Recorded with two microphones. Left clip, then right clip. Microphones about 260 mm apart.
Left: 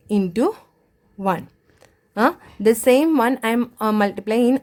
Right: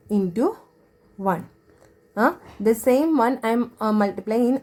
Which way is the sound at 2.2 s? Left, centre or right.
Left.